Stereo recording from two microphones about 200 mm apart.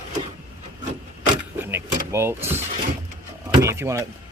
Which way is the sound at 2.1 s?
10° right (ahead or behind).